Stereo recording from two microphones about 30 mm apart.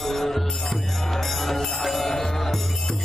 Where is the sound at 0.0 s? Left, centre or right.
Centre.